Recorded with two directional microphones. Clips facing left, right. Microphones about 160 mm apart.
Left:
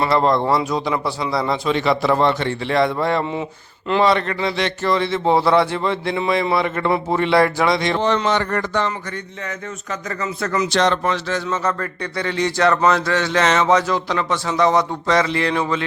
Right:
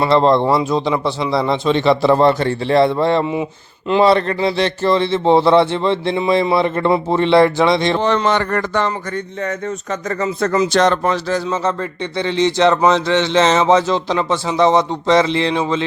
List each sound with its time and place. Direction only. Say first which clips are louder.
0.0 s speech: right 4 dB; 25° right (ahead or behind)
8.0 s speech: right 2 dB; 55° right (ahead or behind)
9.4 s speech: right 7 dB; 40° right (ahead or behind)
10.7 s speech: right 3 dB; 45° right (ahead or behind)
11.4 s speech: right 3 dB; 25° right (ahead or behind)